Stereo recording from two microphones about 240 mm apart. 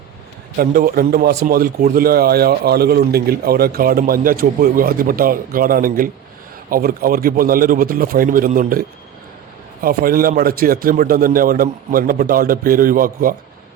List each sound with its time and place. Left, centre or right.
0.5 s speech: right